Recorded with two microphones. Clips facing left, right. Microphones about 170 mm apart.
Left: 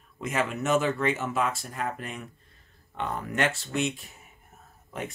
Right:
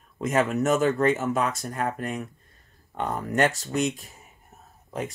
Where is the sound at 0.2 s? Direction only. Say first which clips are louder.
Right 6 dB; 45° right (ahead or behind).